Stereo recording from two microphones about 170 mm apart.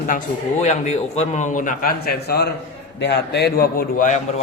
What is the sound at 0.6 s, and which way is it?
A man's voice, 40° left (ahead or behind).